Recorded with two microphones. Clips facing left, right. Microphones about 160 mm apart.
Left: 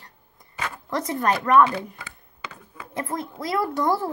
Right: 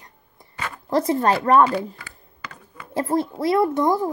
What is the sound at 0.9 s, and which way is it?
Speech, 30° right (ahead or behind).